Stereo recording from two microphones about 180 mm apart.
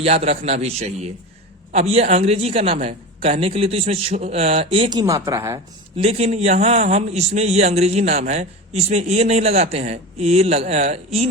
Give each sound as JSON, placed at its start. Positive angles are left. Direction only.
{"t": 0.0, "sound": "a man's voice", "side_deg": -35}
{"t": 6.0, "sound": "a man's voice", "side_deg": -35}